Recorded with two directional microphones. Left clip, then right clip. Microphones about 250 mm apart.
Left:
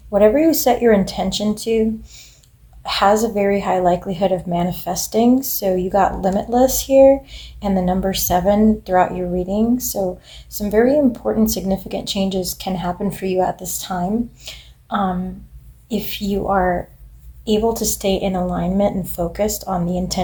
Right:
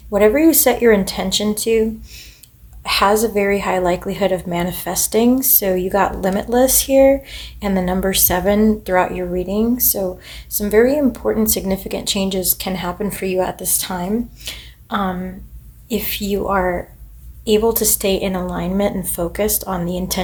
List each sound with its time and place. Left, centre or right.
0.1 s a woman's voice: right